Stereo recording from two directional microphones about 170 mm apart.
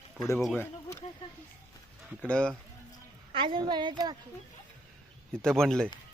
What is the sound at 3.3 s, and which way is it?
Speech, 30° right (ahead or behind).